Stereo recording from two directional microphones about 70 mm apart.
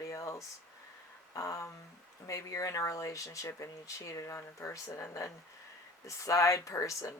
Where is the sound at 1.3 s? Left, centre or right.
Left.